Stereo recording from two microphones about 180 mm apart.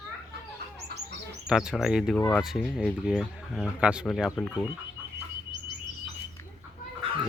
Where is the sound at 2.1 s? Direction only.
15° left (ahead or behind).